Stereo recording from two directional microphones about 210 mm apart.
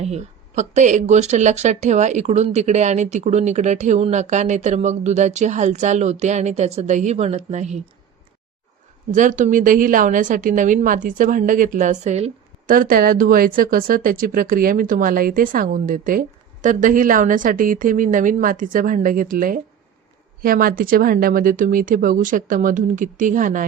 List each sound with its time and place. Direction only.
0.0 s a woman's voice: 30° right (ahead or behind)
9.1 s a woman's voice: 35° right (ahead or behind)